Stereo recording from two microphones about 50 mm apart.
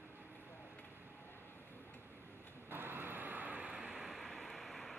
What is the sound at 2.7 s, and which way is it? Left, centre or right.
Vehicle, right.